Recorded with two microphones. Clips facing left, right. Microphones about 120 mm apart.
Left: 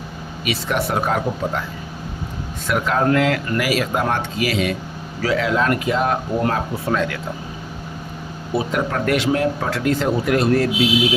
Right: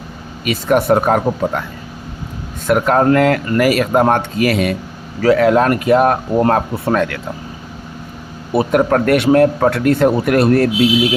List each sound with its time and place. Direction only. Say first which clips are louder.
0.4 s speech: right 8 dB; 50° right (ahead or behind)
2.6 s speech: right 6 dB; 50° right (ahead or behind)
8.5 s speech: right 8 dB; 55° right (ahead or behind)